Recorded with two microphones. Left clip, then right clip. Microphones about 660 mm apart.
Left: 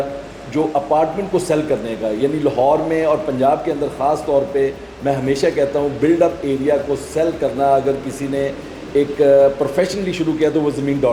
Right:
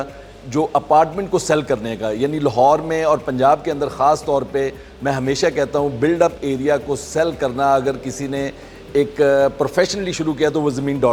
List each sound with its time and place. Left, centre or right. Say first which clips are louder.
0.5 s a man's voice: right 2 dB; right